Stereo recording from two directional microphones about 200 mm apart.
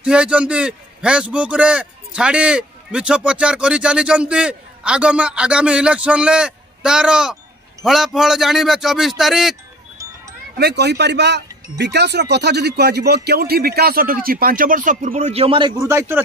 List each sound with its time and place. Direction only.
0.0 s a man's voice: 5° right (ahead or behind)
10.6 s a man's voice: 55° right (ahead or behind); by 16.2 s 15° right (ahead or behind)